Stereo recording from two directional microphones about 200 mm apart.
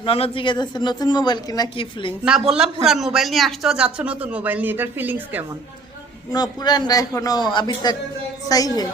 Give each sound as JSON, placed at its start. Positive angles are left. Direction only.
{"t": 0.0, "sound": "speech", "side_deg": 30}
{"t": 2.2, "sound": "a man's voice", "side_deg": -5}
{"t": 6.3, "sound": "a woman's voice", "side_deg": 20}